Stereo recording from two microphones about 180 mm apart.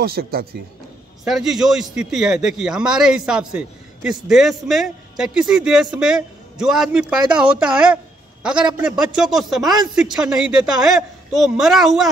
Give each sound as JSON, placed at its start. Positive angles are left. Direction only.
{"t": 0.0, "sound": "speech", "side_deg": -60}
{"t": 1.2, "sound": "a man's voice", "side_deg": 0}